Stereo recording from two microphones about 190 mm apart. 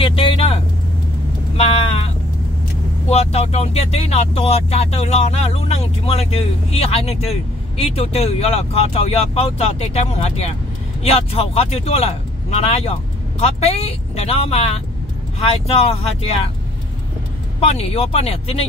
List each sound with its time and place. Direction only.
0.0 s vehicle: 30° left (ahead or behind)
1.6 s vehicle: 35° left (ahead or behind)
3.1 s speech: 35° left (ahead or behind)
17.6 s speech: 30° left (ahead or behind)